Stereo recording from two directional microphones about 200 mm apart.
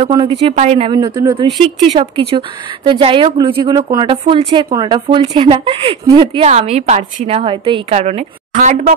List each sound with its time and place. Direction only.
0.0 s speech: 25° right (ahead or behind); by 8.9 s 40° right (ahead or behind)